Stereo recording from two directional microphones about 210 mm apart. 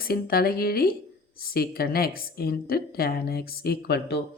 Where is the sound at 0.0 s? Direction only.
45° left (ahead or behind).